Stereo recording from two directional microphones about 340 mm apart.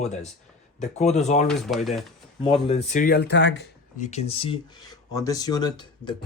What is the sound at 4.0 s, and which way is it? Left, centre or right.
Speech, centre.